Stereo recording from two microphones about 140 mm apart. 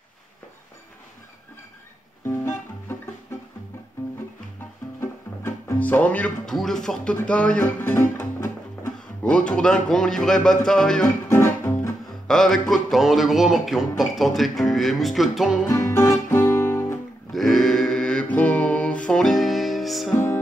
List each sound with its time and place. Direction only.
2.2 s music: 20° left (ahead or behind)
5.0 s speech: 15° left (ahead or behind)
9.2 s music: 5° left (ahead or behind)
11.2 s music: 20° left (ahead or behind)
12.3 s music: 5° left (ahead or behind)
15.6 s music: 20° left (ahead or behind)
17.3 s mantra: centre (ahead or behind)